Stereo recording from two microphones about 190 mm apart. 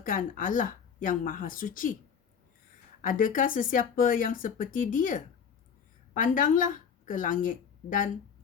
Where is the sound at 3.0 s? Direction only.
45° left (ahead or behind).